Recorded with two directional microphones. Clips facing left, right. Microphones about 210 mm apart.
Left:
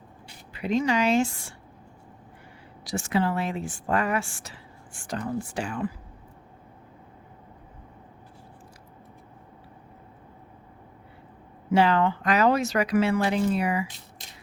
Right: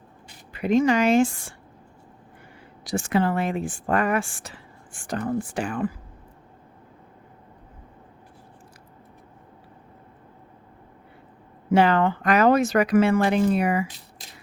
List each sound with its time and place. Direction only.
0.5 s speech: 50° right (ahead or behind)
2.8 s speech: 55° right (ahead or behind)
11.7 s speech: 55° right (ahead or behind)